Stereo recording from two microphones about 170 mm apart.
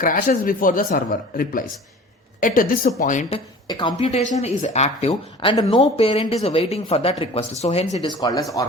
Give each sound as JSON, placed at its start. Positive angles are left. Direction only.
{"t": 0.0, "sound": "a woman's voice", "side_deg": 55}
{"t": 3.3, "sound": "speech", "side_deg": 25}
{"t": 3.9, "sound": "speech", "side_deg": 40}
{"t": 8.2, "sound": "speech", "side_deg": 20}